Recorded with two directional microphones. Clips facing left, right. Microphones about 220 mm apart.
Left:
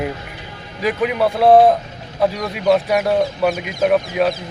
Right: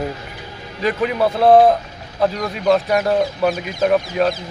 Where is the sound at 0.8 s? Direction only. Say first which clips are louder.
Even; 5° left (ahead or behind).